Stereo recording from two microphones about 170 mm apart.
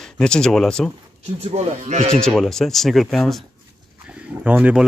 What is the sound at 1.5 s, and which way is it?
Speech, 40° right (ahead or behind).